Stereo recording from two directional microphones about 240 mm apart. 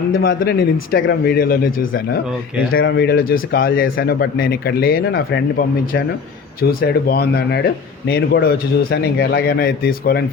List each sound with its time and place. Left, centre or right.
0.2 s a man's voice: left